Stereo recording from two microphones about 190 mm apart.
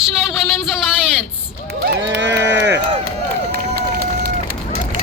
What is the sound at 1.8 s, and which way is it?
Run, 65° right (ahead or behind).